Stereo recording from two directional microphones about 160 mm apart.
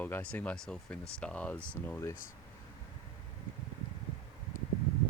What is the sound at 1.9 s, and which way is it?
Speech, 20° left (ahead or behind).